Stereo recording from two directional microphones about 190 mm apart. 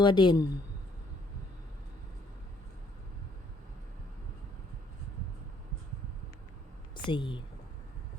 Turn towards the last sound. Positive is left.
turn(degrees=25)  # may be behind; listen again after turning